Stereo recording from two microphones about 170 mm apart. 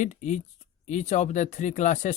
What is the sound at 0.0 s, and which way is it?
Speech, 45° left (ahead or behind).